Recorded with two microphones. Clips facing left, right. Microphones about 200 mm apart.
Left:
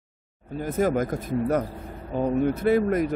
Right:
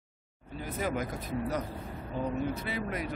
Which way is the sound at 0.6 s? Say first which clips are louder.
Left 10 dB; 50° left (ahead or behind).